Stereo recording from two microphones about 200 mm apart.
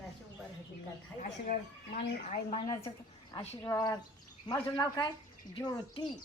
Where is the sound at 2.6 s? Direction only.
20° left (ahead or behind).